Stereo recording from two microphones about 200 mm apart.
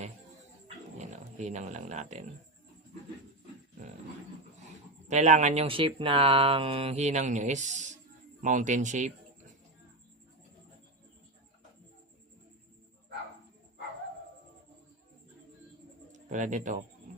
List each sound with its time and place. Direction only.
0.9 s speech: 35° right (ahead or behind)
5.0 s speech: 35° right (ahead or behind)
16.1 s speech: 40° right (ahead or behind)